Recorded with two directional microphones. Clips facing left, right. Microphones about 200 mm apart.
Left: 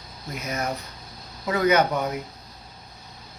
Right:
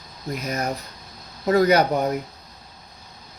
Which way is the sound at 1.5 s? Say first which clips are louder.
Right 4 dB; 35° right (ahead or behind).